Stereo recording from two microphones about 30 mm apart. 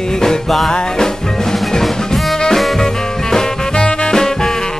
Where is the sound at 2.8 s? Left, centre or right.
Centre.